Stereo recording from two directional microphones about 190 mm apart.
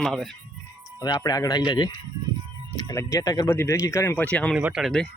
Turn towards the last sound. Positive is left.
turn(degrees=0)  # may be behind; listen again after turning